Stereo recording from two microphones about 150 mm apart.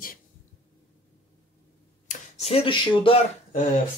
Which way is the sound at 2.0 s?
45° left (ahead or behind).